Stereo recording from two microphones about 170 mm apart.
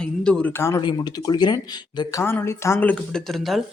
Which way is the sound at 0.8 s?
25° left (ahead or behind).